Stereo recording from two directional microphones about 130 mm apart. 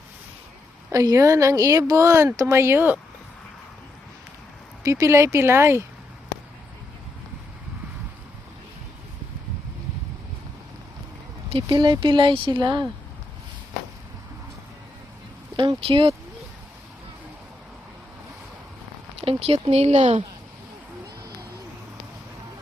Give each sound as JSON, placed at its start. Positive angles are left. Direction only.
{"t": 0.9, "sound": "speech", "side_deg": -25}
{"t": 4.8, "sound": "speech", "side_deg": -25}
{"t": 11.5, "sound": "speech", "side_deg": -35}
{"t": 15.5, "sound": "speech", "side_deg": -40}
{"t": 19.2, "sound": "speech", "side_deg": -45}